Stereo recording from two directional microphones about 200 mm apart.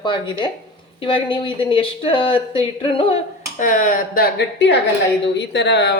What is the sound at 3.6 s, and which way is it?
Speech, 40° left (ahead or behind).